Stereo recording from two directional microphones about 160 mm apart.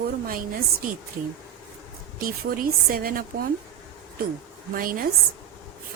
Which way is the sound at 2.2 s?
65° right (ahead or behind).